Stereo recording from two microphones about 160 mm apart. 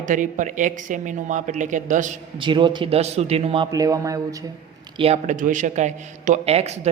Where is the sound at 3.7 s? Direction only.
20° right (ahead or behind).